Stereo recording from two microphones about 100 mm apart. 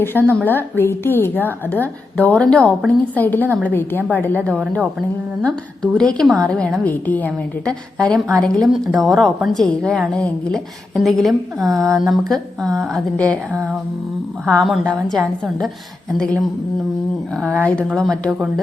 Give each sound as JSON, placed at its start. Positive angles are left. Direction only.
{"t": 0.0, "sound": "a woman's voice", "side_deg": 20}
{"t": 10.9, "sound": "speech", "side_deg": 0}
{"t": 14.6, "sound": "a woman's voice", "side_deg": 0}
{"t": 17.6, "sound": "a woman's voice", "side_deg": 15}
{"t": 17.9, "sound": "speech", "side_deg": 5}